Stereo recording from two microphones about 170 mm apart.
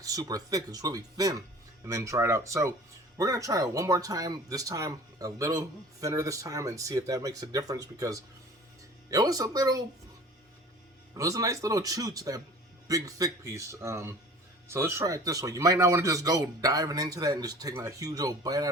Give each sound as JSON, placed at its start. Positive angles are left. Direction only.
{"t": 0.0, "sound": "speech", "side_deg": -20}
{"t": 11.1, "sound": "speech", "side_deg": -20}